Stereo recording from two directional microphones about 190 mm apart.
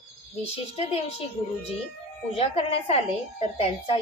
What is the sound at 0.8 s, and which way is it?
Speech, 35° left (ahead or behind).